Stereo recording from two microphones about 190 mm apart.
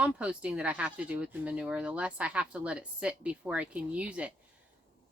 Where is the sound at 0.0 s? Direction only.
5° right (ahead or behind).